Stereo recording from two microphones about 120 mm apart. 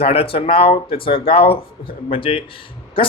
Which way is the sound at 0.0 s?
55° left (ahead or behind).